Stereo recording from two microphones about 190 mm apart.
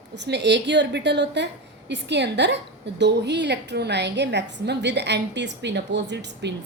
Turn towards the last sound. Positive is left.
turn(degrees=-65)  # may be behind; listen again after turning